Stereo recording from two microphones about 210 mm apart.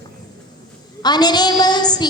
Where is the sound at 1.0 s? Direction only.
20° left (ahead or behind).